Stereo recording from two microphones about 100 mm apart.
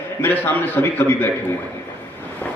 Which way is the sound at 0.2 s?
20° left (ahead or behind).